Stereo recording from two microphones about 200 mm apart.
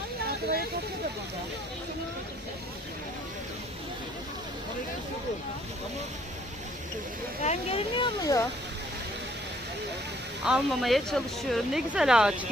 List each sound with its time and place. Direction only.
7.4 s speech: 30° left (ahead or behind)
10.4 s speech: centre (ahead or behind)